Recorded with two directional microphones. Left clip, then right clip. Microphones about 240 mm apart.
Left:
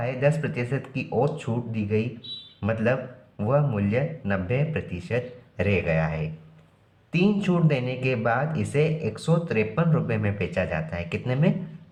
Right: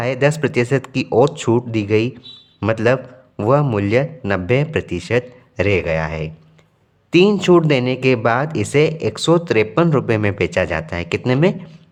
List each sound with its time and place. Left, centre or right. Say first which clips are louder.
0.0 s speech: right 8 dB; right